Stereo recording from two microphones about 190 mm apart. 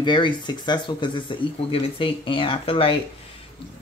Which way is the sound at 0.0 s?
25° left (ahead or behind).